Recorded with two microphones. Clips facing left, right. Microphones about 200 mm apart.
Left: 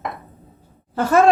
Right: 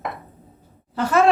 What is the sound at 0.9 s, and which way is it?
Speech, 50° left (ahead or behind).